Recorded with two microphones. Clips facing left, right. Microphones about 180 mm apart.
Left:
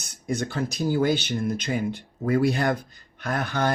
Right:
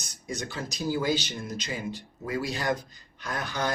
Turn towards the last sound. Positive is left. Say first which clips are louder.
# left 5 dB
turn(degrees=55)  # may be behind; listen again after turning